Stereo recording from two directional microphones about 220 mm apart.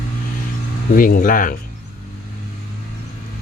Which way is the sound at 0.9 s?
40° left (ahead or behind).